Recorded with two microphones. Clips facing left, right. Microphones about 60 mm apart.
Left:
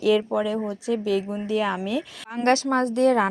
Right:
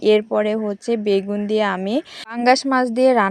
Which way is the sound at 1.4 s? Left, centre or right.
Right.